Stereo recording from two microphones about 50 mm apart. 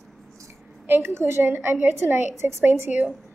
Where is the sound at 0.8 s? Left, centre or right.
Right.